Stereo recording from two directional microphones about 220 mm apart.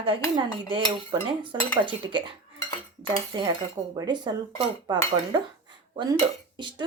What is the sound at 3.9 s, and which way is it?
Speech, 20° right (ahead or behind).